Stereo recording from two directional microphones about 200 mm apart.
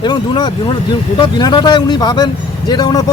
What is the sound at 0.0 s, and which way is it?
Speech, 20° left (ahead or behind).